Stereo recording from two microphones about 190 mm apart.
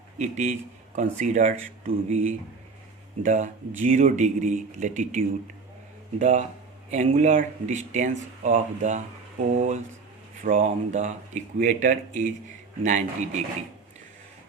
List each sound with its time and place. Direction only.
0.2 s speech: 40° right (ahead or behind)